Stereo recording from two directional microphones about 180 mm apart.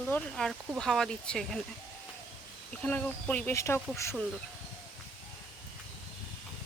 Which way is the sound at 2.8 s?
5° left (ahead or behind).